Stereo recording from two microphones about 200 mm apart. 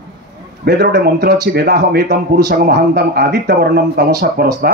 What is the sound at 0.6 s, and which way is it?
A man's voice, 55° right (ahead or behind).